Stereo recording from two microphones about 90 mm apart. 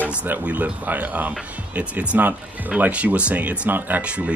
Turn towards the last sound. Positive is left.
turn(degrees=-15)  # may be behind; listen again after turning